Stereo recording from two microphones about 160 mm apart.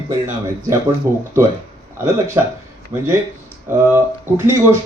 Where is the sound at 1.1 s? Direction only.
15° right (ahead or behind).